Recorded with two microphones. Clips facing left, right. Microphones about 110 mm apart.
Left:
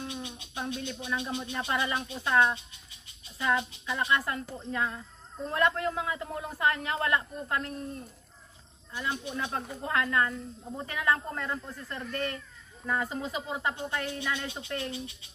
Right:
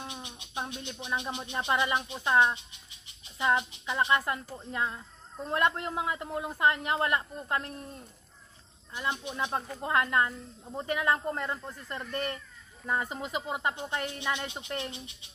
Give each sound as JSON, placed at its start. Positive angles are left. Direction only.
{"t": 0.0, "sound": "a man's voice", "side_deg": -20}
{"t": 8.9, "sound": "a man's voice", "side_deg": -20}